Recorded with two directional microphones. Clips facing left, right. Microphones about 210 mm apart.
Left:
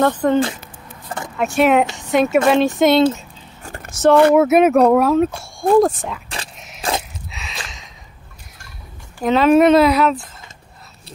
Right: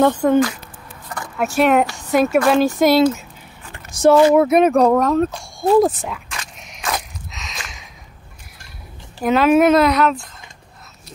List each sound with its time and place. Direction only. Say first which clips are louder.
0.0 s speech: right 1 dB; 10° right (ahead or behind)
1.4 s speech: left 1 dB; centre (ahead or behind)
3.6 s a sound: left 6 dB; 45° left (ahead or behind)
3.9 s speech: even; 10° right (ahead or behind)
4.4 s speech: left 1 dB; 5° left (ahead or behind)
6.2 s a sound: left 2 dB; 35° left (ahead or behind)
9.2 s speech: left 1 dB; 5° right (ahead or behind)